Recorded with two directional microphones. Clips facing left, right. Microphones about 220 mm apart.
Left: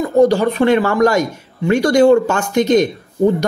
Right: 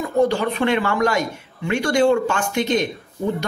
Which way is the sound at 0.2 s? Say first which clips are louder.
Left 6 dB; 40° left (ahead or behind).